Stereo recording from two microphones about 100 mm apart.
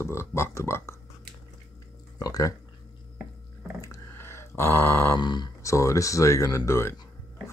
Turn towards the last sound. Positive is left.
turn(degrees=25)  # may be behind; listen again after turning